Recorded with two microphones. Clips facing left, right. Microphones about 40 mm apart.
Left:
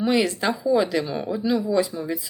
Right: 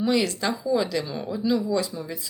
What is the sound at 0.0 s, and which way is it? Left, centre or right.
A woman's voice, centre.